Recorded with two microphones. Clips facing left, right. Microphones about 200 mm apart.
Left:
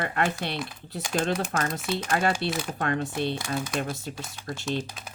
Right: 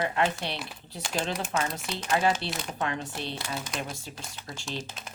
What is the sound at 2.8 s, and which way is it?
Speech, 50° left (ahead or behind).